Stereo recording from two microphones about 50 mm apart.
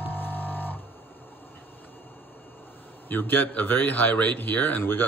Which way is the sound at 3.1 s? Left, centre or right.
Left.